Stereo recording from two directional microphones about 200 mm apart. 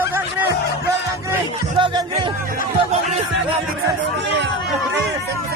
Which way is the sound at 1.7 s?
25° right (ahead or behind).